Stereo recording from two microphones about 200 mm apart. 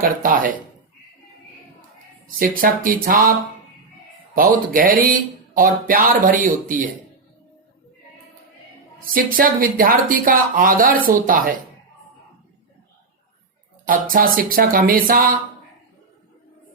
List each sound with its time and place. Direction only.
0.0 s speech: 45° right (ahead or behind)
2.2 s speech: 45° right (ahead or behind)
4.4 s speech: 45° right (ahead or behind)
9.0 s speech: 45° right (ahead or behind)
13.8 s speech: 45° right (ahead or behind)